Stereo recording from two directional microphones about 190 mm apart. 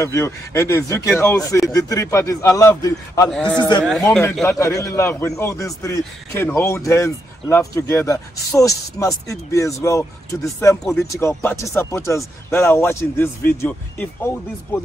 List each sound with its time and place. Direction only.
0.0 s a man's voice: 15° left (ahead or behind)
3.3 s a man's voice: 5° left (ahead or behind)
3.5 s speech: 25° left (ahead or behind)
3.8 s a man's voice: centre (ahead or behind)
4.5 s a man's voice: 15° left (ahead or behind)